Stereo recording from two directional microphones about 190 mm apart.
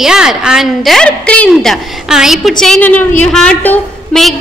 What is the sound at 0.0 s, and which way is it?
A woman's voice, 5° right (ahead or behind).